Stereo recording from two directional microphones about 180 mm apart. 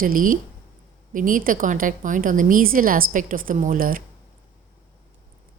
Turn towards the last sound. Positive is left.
turn(degrees=-50)  # may be behind; listen again after turning